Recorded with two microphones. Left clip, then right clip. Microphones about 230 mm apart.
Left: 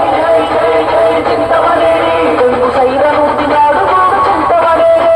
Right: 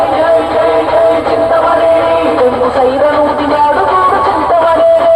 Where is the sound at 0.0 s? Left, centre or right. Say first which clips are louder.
Even; left.